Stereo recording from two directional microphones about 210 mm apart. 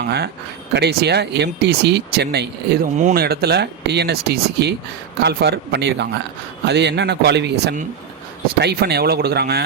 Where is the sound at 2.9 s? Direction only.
40° right (ahead or behind).